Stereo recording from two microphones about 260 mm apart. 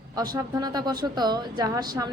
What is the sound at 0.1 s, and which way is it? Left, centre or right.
A woman's voice, centre.